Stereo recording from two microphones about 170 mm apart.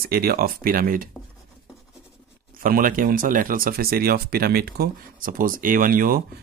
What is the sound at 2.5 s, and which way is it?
Speech, 55° right (ahead or behind).